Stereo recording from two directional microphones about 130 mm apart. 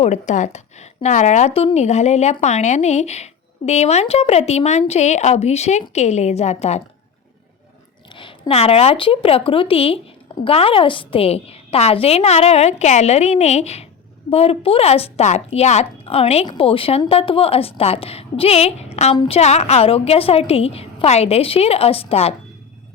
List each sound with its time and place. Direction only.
0.0 s speech: 65° left (ahead or behind)
8.1 s a woman's voice: 45° left (ahead or behind)